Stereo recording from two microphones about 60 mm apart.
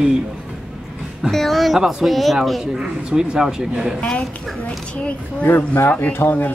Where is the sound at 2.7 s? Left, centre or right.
Centre.